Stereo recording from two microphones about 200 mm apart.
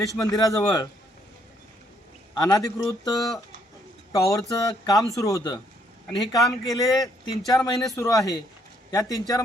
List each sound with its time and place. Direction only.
0.2 s a man's voice: 15° left (ahead or behind)
2.4 s a man's voice: 20° left (ahead or behind)
6.1 s speech: centre (ahead or behind)
6.7 s a man's voice: 15° left (ahead or behind)